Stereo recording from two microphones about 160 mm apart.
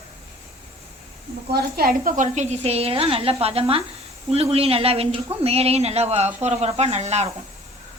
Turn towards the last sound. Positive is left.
turn(degrees=-45)  # may be behind; listen again after turning